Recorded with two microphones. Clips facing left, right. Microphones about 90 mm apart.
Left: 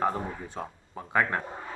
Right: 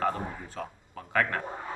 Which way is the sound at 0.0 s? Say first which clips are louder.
Left 1 dB; 20° left (ahead or behind).